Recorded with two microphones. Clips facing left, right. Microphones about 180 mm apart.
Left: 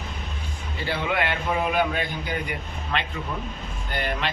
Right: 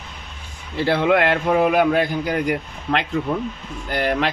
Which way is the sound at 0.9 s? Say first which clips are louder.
Right 9 dB; 75° right (ahead or behind).